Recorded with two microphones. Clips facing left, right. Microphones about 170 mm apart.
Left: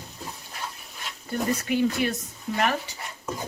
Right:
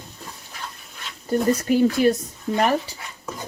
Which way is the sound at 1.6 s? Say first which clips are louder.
Right 7 dB; 40° right (ahead or behind).